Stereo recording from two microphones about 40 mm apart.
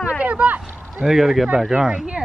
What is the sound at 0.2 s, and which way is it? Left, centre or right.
Speech, right.